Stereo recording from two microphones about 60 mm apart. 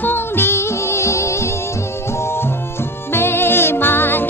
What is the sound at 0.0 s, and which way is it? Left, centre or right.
Music, left.